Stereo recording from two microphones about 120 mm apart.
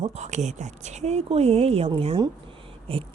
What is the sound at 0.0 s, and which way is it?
Speech, 70° right (ahead or behind).